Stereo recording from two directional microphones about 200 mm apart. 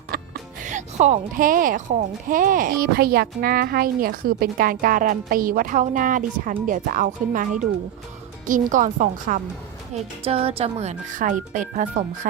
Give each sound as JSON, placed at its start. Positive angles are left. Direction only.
{"t": 0.1, "sound": "music", "side_deg": -45}
{"t": 0.6, "sound": "a woman's voice", "side_deg": -40}
{"t": 9.9, "sound": "speech", "side_deg": -30}